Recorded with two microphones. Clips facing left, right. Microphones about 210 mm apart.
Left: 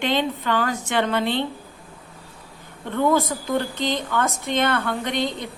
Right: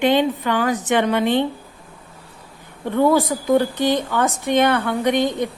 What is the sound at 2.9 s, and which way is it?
A woman's voice, 15° right (ahead or behind).